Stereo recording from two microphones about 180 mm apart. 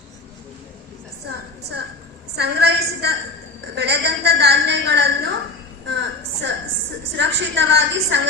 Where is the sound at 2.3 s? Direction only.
65° right (ahead or behind).